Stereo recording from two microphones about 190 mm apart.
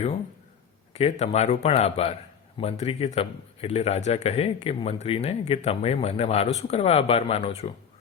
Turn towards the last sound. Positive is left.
turn(degrees=35)  # may be behind; listen again after turning